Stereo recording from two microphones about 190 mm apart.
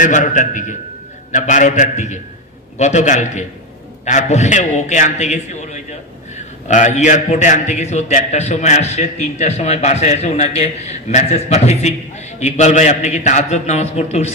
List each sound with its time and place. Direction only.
0.0 s a man's voice: 40° left (ahead or behind)